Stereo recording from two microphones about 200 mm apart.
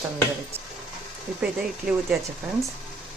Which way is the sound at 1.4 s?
5° right (ahead or behind).